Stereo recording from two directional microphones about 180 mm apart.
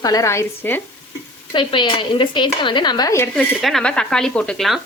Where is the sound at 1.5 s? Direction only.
25° left (ahead or behind).